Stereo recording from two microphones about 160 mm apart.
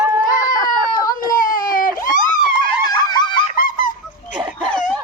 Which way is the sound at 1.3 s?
60° left (ahead or behind).